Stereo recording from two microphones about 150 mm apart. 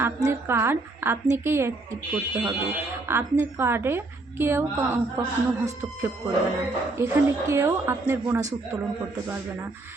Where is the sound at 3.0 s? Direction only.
15° right (ahead or behind).